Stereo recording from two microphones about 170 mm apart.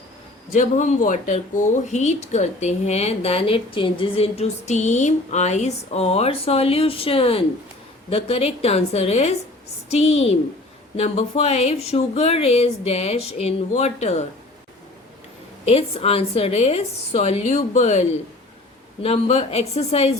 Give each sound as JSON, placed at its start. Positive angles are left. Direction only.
{"t": 0.5, "sound": "speech", "side_deg": 45}
{"t": 15.6, "sound": "speech", "side_deg": 35}
{"t": 19.0, "sound": "speech", "side_deg": 35}